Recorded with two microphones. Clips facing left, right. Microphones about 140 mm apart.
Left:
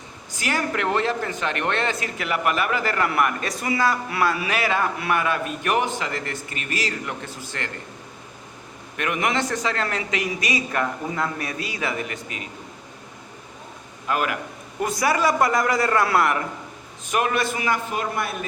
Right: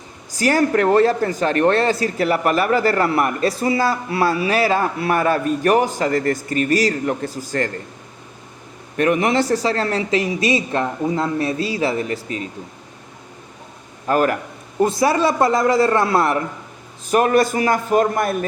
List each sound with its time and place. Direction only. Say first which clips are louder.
0.3 s speech: right 9 dB; 40° right (ahead or behind)
9.0 s speech: right 7 dB; 35° right (ahead or behind)
14.1 s speech: right 7 dB; 40° right (ahead or behind)
14.8 s a man's voice: right 6 dB; 25° right (ahead or behind)
17.1 s speech: right 7 dB; 40° right (ahead or behind)